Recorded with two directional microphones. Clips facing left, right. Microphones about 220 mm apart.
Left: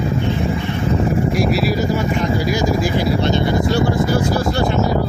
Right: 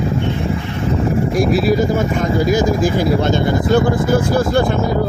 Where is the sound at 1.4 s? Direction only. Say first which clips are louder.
Right 3 dB; 50° right (ahead or behind).